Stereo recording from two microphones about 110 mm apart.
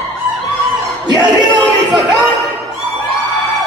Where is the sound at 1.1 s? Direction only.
40° right (ahead or behind).